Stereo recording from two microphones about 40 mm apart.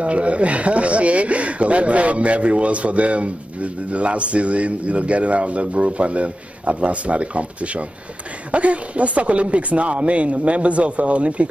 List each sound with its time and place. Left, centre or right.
0.0 s speech: right